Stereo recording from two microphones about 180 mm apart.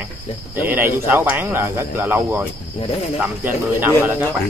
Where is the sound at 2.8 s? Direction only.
30° left (ahead or behind).